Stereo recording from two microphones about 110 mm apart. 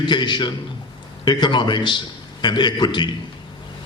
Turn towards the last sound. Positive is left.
turn(degrees=45)  # may be behind; listen again after turning